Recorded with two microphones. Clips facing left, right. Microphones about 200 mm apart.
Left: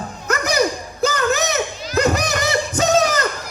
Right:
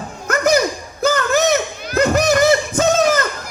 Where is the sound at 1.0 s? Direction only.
50° right (ahead or behind).